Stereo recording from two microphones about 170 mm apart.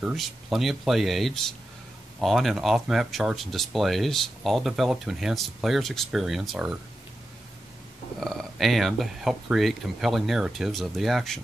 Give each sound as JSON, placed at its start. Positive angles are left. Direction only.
{"t": 0.0, "sound": "speech", "side_deg": 0}
{"t": 8.2, "sound": "speech", "side_deg": 0}